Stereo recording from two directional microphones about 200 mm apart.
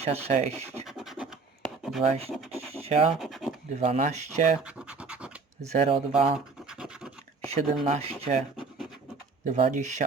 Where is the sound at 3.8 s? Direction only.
35° right (ahead or behind).